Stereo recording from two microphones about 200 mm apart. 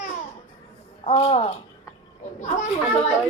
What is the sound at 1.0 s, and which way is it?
A child's voice, 30° left (ahead or behind).